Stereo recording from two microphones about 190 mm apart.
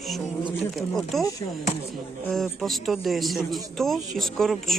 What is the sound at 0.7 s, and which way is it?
Speech, centre (ahead or behind).